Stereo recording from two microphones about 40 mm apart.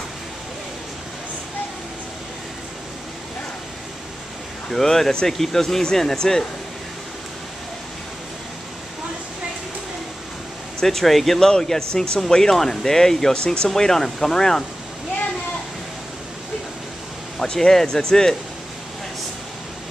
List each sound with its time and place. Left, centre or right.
4.6 s speech: centre
10.8 s speech: centre
13.4 s speech: left
13.7 s speech: centre
17.4 s speech: centre